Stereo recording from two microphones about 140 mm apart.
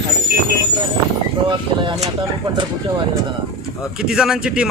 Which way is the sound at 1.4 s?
35° right (ahead or behind).